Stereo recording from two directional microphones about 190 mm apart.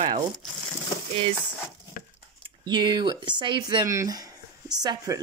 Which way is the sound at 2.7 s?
25° right (ahead or behind).